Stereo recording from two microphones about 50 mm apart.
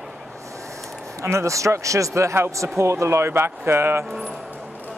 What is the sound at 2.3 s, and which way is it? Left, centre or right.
Speech, right.